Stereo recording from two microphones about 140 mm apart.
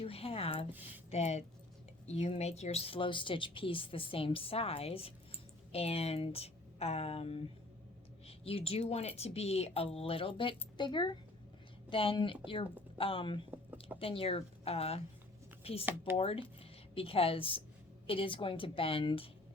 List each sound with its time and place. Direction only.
0.0 s a woman's voice: 45° left (ahead or behind)
13.5 s a sound: 15° right (ahead or behind)
14.0 s a woman's voice: 40° left (ahead or behind)